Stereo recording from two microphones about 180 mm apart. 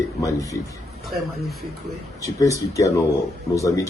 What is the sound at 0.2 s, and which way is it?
Speech, 20° left (ahead or behind).